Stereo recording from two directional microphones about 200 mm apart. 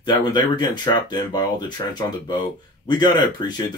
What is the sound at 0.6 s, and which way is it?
Speech, 20° left (ahead or behind).